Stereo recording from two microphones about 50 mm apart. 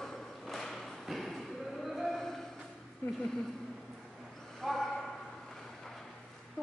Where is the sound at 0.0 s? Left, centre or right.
Centre.